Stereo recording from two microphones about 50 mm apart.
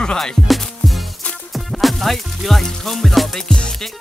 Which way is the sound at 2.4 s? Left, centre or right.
Centre.